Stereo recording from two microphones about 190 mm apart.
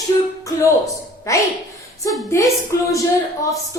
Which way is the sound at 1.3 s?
15° left (ahead or behind).